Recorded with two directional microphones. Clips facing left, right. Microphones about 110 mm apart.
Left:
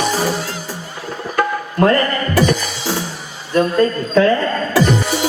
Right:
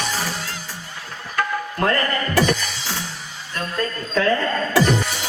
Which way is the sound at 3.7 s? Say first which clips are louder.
Left 5 dB; 30° left (ahead or behind).